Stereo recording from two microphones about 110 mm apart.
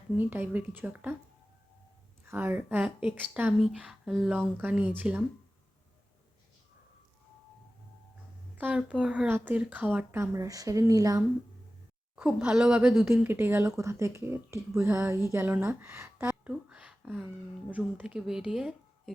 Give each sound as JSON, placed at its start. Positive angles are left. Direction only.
{"t": 0.2, "sound": "speech", "side_deg": -15}
{"t": 2.2, "sound": "speech", "side_deg": -20}
{"t": 8.5, "sound": "speech", "side_deg": -10}
{"t": 12.1, "sound": "speech", "side_deg": -10}
{"t": 13.1, "sound": "speech", "side_deg": -20}
{"t": 16.3, "sound": "a sound", "side_deg": -10}
{"t": 17.7, "sound": "speech", "side_deg": -15}